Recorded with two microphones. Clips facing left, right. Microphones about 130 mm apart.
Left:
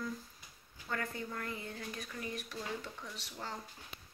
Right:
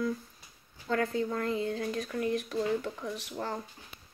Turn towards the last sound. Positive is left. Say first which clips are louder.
# right 9 dB
turn(degrees=-55)  # may be behind; listen again after turning